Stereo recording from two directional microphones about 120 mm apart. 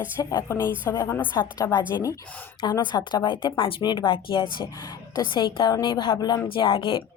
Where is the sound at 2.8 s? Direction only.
35° left (ahead or behind).